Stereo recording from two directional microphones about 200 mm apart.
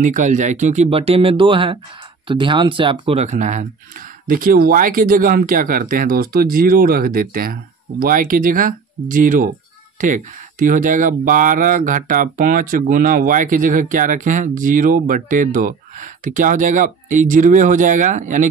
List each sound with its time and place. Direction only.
0.0 s speech: 40° right (ahead or behind)